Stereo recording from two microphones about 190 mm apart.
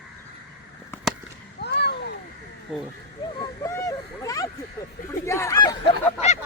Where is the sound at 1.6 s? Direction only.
60° left (ahead or behind).